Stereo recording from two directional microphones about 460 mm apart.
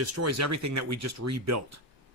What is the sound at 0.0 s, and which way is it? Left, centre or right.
Speech, right.